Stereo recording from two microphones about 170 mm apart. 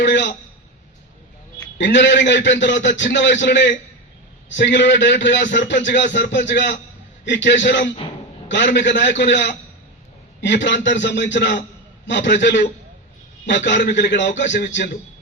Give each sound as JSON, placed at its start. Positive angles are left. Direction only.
{"t": 0.0, "sound": "a man's voice", "side_deg": 90}
{"t": 1.8, "sound": "a man's voice", "side_deg": 90}
{"t": 13.9, "sound": "a man's voice", "side_deg": 90}